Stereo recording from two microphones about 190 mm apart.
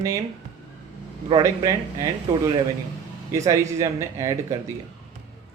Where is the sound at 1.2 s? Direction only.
30° right (ahead or behind).